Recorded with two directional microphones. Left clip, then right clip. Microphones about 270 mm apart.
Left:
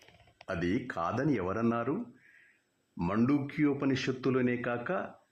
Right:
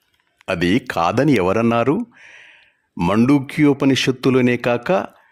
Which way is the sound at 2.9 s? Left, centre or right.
Right.